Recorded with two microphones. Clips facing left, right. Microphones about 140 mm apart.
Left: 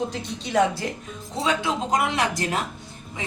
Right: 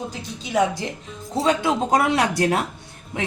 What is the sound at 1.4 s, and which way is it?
Speech, 55° right (ahead or behind).